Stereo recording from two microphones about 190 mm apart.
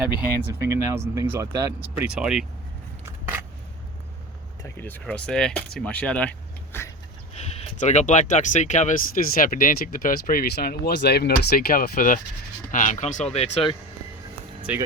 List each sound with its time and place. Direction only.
0.6 s speech: 15° right (ahead or behind)
2.0 s speech: 5° right (ahead or behind)
4.6 s speech: 10° left (ahead or behind)
7.3 s speech: 35° left (ahead or behind)
14.7 s speech: 10° right (ahead or behind)